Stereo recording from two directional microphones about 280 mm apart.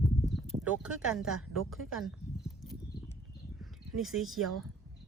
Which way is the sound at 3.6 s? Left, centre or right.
Centre.